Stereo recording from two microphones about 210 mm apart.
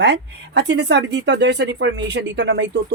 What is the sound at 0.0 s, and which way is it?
Speech, 55° right (ahead or behind).